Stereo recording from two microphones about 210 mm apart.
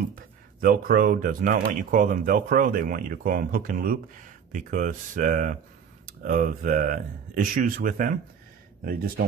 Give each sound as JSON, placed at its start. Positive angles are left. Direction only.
{"t": 0.1, "sound": "speech", "side_deg": -45}